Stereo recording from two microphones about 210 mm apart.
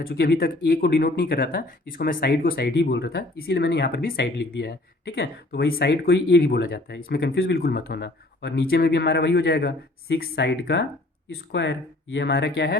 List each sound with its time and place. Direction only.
0.0 s speech: 45° left (ahead or behind)
12.1 s speech: 55° left (ahead or behind)